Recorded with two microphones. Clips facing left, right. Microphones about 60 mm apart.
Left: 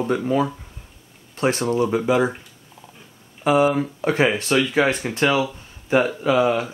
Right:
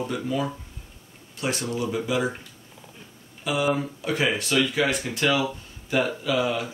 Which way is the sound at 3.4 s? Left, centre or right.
Left.